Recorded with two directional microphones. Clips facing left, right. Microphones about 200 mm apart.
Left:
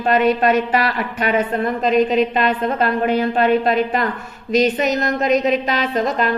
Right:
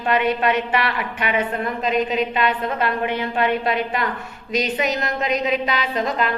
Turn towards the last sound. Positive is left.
turn(degrees=45)  # may be behind; listen again after turning